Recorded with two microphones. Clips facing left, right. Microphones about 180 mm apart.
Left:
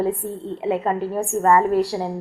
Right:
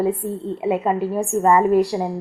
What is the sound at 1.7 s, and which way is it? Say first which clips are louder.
Speech: right 3 dB; 15° right (ahead or behind).